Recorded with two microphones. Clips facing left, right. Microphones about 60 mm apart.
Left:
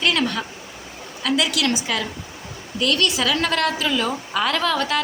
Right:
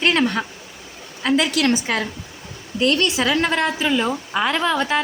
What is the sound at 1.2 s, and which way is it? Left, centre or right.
A woman's voice, right.